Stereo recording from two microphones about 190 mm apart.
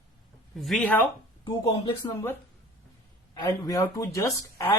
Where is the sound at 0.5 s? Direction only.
Centre (ahead or behind).